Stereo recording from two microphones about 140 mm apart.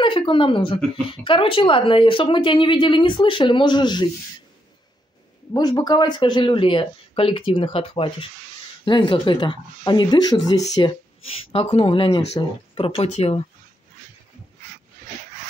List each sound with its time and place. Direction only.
0.0 s speech: 35° left (ahead or behind)
5.5 s speech: 30° left (ahead or behind)
11.2 s speech: 45° left (ahead or behind)